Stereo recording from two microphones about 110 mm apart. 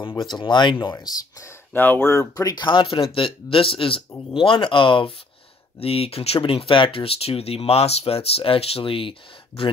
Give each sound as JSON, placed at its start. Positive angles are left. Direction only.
{"t": 0.1, "sound": "speech", "side_deg": 40}
{"t": 0.9, "sound": "speech", "side_deg": 30}
{"t": 1.7, "sound": "speech", "side_deg": 20}
{"t": 5.8, "sound": "speech", "side_deg": 60}